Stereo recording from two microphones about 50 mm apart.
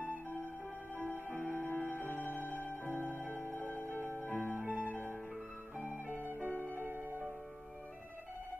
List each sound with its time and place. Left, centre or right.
1.1 s music: right
1.5 s music: left
2.1 s music: right
2.4 s music: left
4.4 s music: right
6.0 s music: right